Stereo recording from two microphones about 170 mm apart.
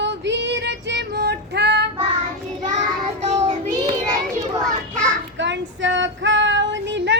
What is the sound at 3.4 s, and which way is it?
Child singing, 35° right (ahead or behind).